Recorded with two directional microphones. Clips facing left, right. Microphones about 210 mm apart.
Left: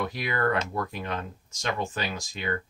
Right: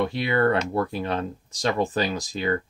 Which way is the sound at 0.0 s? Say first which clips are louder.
Right 6 dB; 30° right (ahead or behind).